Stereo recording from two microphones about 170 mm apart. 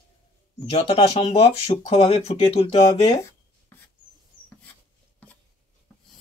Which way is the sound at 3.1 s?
15° left (ahead or behind).